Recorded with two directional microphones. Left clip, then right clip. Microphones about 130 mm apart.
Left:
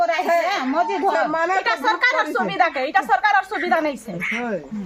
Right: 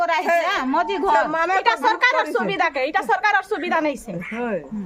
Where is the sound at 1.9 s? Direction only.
45° right (ahead or behind).